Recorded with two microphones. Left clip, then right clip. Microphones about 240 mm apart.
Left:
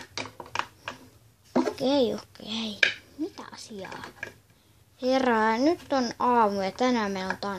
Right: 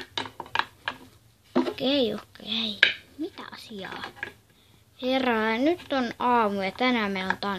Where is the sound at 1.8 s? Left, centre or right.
Centre.